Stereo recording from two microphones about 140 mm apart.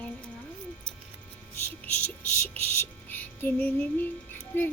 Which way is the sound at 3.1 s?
15° left (ahead or behind).